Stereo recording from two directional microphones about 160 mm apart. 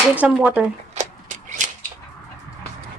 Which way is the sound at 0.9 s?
50° right (ahead or behind).